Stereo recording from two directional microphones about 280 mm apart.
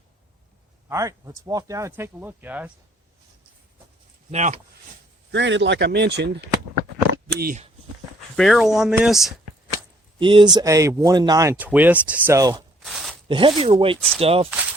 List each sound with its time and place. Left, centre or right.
0.9 s speech: centre
4.3 s speech: right
5.3 s speech: right
7.3 s speech: right
8.4 s speech: centre
10.2 s speech: centre
12.8 s a sound: centre
13.2 s speech: centre
14.5 s a sound: centre